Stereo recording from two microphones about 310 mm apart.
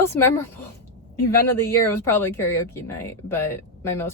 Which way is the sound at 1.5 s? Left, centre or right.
Centre.